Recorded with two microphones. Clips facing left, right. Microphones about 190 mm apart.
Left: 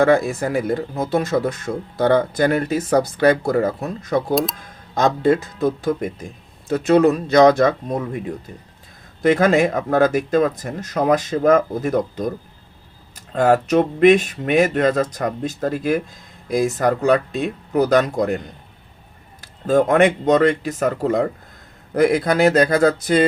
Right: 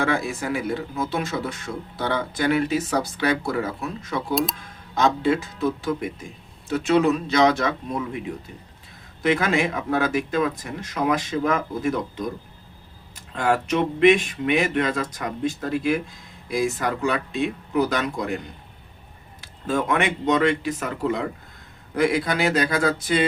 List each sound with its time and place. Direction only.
0.0 s speech: 45° left (ahead or behind)
9.2 s speech: 45° left (ahead or behind)
13.3 s speech: 40° left (ahead or behind)
19.4 s speech: 45° left (ahead or behind)